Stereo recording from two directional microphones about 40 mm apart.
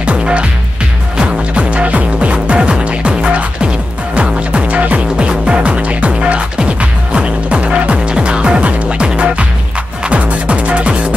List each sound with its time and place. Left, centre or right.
0.0 s music: right